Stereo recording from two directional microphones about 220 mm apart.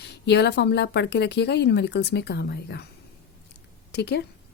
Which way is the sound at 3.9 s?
50° left (ahead or behind).